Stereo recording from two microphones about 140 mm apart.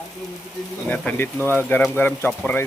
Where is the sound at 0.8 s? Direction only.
10° left (ahead or behind).